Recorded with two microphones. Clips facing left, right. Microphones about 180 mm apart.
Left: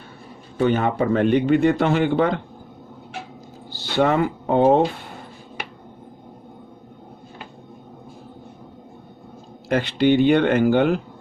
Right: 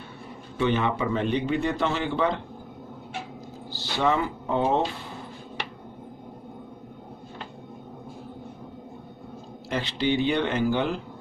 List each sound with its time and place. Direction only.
0.6 s speech: 45° left (ahead or behind); by 2.4 s 60° left (ahead or behind)
3.9 s speech: 60° left (ahead or behind)
9.6 s speech: 55° left (ahead or behind)